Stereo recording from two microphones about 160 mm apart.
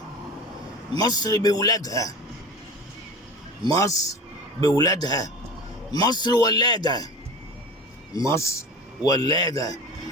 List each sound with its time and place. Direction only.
0.9 s a man's voice: 25° left (ahead or behind)
3.6 s a man's voice: 20° left (ahead or behind)
8.3 s a man's voice: 20° left (ahead or behind)